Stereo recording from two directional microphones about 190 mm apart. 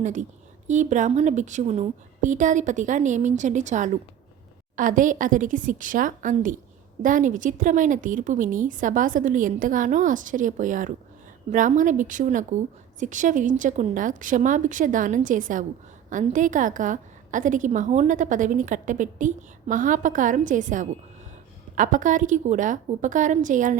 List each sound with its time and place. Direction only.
0.0 s a woman's voice: 40° right (ahead or behind)